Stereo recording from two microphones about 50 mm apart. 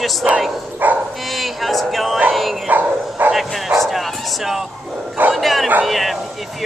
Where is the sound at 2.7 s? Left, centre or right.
Right.